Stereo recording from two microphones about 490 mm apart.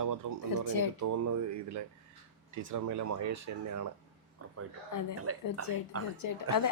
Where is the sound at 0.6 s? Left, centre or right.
Left.